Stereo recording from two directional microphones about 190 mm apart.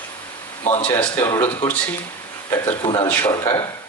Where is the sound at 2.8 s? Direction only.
25° left (ahead or behind).